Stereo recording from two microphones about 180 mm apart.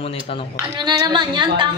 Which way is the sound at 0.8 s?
25° right (ahead or behind).